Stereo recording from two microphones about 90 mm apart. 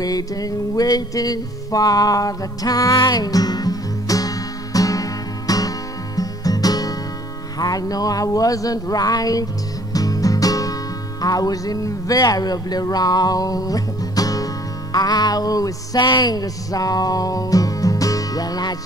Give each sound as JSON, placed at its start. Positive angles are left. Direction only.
{"t": 0.0, "sound": "music", "side_deg": 45}